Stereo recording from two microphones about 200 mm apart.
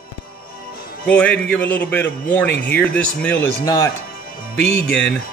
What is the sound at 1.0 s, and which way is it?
Speech, 5° left (ahead or behind).